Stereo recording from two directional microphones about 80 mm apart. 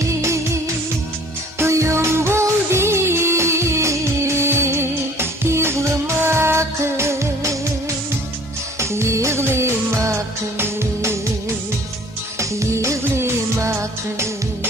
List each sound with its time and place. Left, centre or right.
0.0 s music: right
1.5 s music: right
8.8 s music: right
12.4 s music: right